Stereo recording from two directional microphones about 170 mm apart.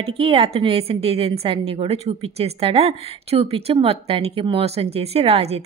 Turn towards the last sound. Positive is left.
turn(degrees=-35)  # may be behind; listen again after turning